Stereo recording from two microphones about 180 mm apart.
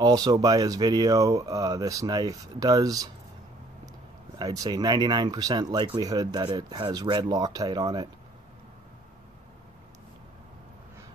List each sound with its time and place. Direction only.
0.0 s speech: 20° right (ahead or behind)
4.4 s speech: 20° right (ahead or behind)